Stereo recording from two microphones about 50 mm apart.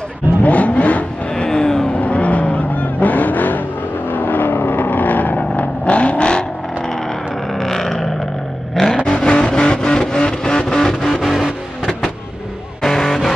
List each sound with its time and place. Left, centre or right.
0.4 s vehicle: left
1.3 s vehicle: centre
2.0 s vehicle: left
7.5 s a sound: centre
8.9 s vehicle: centre
12.8 s music: centre